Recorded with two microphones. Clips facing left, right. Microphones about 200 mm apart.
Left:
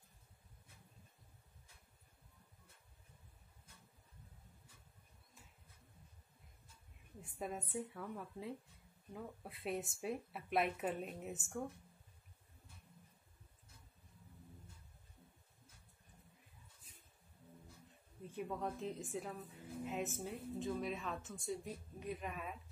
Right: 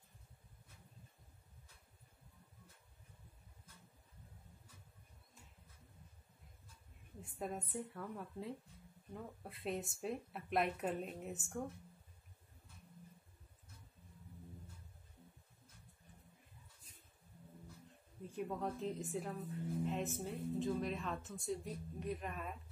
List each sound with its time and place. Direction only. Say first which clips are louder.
7.2 s a woman's voice: right 1 dB; centre (ahead or behind)
18.2 s a woman's voice: right 1 dB; centre (ahead or behind)